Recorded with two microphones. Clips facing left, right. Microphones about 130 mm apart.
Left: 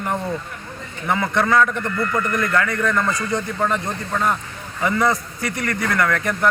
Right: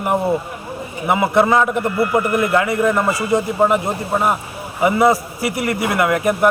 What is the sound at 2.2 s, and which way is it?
Speech, 10° right (ahead or behind).